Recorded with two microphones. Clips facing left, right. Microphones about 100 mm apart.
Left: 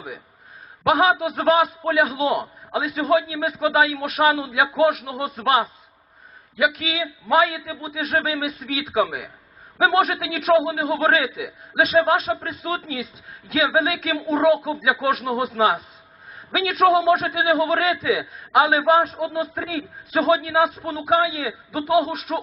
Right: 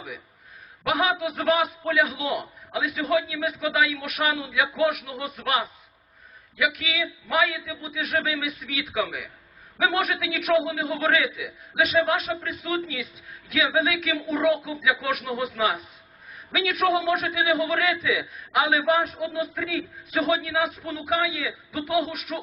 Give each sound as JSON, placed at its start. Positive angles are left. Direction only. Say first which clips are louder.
{"t": 0.9, "sound": "a man's voice", "louder": "left 6 dB", "side_deg": 30}
{"t": 16.3, "sound": "a sound", "louder": "left 3 dB", "side_deg": 30}
{"t": 16.9, "sound": "a man's voice", "louder": "left 6 dB", "side_deg": 30}